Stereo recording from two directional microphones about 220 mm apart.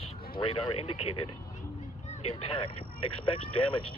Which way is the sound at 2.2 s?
25° left (ahead or behind).